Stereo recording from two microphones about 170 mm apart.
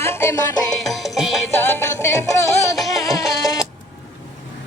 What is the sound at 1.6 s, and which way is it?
Music, 15° left (ahead or behind).